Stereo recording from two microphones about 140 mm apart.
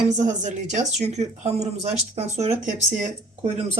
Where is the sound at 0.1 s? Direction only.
60° right (ahead or behind).